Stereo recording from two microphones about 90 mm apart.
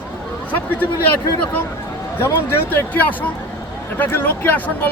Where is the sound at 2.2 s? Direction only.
25° left (ahead or behind).